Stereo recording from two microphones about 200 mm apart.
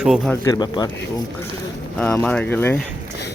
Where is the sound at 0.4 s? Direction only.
20° left (ahead or behind).